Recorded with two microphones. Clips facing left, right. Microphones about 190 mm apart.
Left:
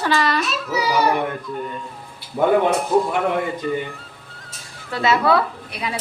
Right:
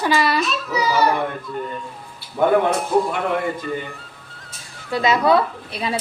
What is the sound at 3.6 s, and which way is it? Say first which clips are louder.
Speech: left 3 dB; 5° left (ahead or behind).